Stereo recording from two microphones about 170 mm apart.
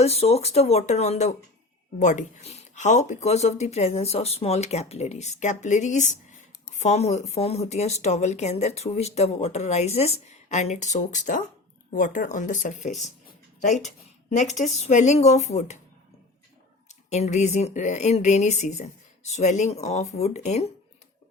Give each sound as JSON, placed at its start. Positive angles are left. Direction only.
{"t": 0.0, "sound": "speech", "side_deg": 35}
{"t": 14.8, "sound": "speech", "side_deg": 45}
{"t": 16.9, "sound": "speech", "side_deg": 40}